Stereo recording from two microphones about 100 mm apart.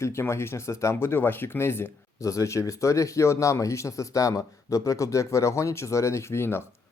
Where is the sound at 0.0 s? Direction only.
25° left (ahead or behind).